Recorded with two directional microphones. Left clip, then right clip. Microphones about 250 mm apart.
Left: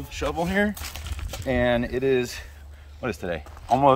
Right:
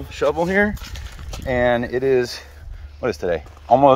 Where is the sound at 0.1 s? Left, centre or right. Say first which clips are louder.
Right 7 dB; centre.